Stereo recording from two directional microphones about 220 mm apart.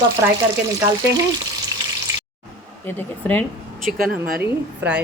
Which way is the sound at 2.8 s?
10° left (ahead or behind).